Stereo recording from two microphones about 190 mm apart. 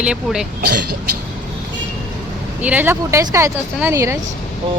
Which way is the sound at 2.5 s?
10° right (ahead or behind).